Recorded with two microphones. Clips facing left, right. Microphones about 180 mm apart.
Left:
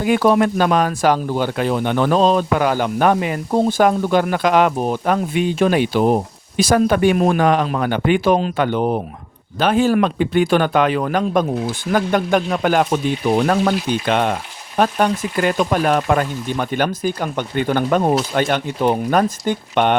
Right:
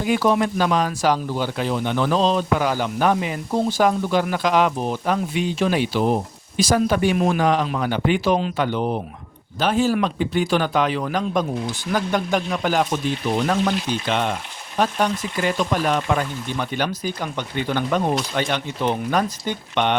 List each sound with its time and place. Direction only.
0.0 s speech: 60° left (ahead or behind)